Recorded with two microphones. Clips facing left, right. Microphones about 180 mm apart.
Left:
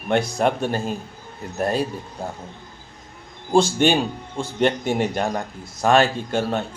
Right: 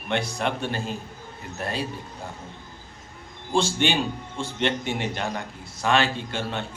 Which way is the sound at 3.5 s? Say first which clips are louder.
Left 6 dB; 40° left (ahead or behind).